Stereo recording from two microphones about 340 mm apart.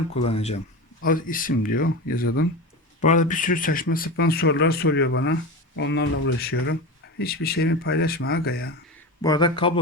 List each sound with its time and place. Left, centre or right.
0.2 s speech: centre
9.2 s speech: centre